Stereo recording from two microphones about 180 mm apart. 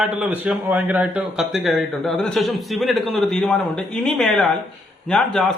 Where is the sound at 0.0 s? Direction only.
5° right (ahead or behind).